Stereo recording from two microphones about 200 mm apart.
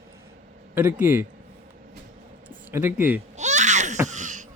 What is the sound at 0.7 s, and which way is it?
Speech, 10° right (ahead or behind).